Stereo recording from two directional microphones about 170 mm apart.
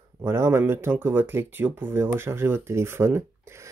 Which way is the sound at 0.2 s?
15° right (ahead or behind).